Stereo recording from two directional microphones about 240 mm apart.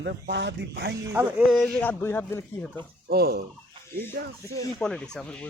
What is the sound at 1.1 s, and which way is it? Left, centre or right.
Speech, centre.